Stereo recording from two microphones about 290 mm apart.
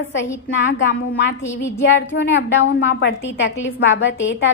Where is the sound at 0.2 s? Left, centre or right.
Centre.